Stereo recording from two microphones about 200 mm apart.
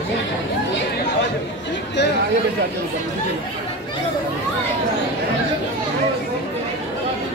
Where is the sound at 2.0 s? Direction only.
60° left (ahead or behind).